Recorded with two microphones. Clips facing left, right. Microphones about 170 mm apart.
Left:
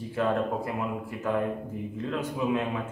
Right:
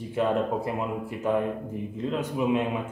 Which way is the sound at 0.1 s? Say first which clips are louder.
Right 2 dB; 20° right (ahead or behind).